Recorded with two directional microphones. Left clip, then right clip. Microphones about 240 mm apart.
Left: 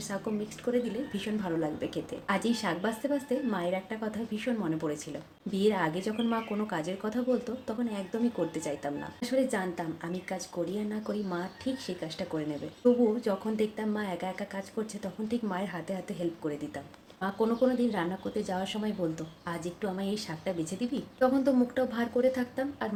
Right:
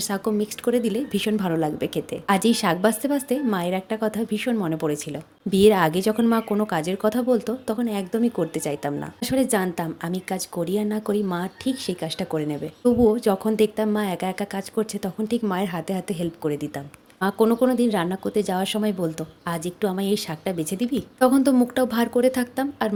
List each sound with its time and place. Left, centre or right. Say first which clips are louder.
0.1 s speech: right 8 dB; right